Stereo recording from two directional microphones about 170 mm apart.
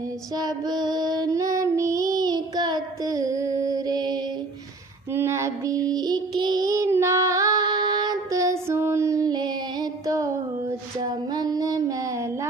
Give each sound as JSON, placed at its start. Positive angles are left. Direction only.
{"t": 0.3, "sound": "female singing", "side_deg": -25}
{"t": 5.1, "sound": "child singing", "side_deg": -15}
{"t": 10.7, "sound": "lullaby", "side_deg": -25}